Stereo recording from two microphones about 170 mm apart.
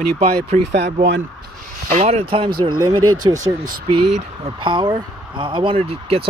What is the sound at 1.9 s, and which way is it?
Speech, 40° right (ahead or behind).